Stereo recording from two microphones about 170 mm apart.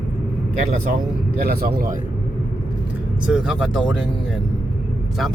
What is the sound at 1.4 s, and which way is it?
Speech, 65° right (ahead or behind).